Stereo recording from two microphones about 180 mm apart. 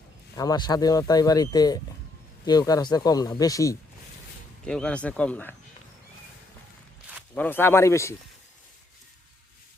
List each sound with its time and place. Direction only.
0.3 s speech: 20° left (ahead or behind)
4.6 s speech: 5° left (ahead or behind)
7.3 s speech: 10° left (ahead or behind)